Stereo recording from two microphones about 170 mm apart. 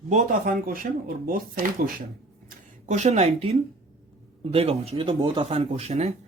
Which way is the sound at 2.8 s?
45° right (ahead or behind).